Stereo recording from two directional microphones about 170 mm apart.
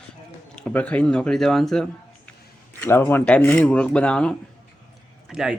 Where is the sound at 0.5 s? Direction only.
5° left (ahead or behind).